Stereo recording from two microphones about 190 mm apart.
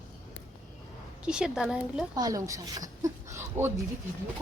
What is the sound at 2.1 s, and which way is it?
Speech, 20° right (ahead or behind).